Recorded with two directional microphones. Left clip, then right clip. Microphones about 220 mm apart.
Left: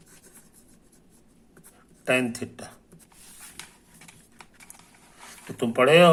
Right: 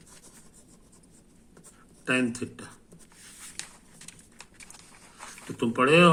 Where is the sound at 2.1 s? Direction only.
25° left (ahead or behind).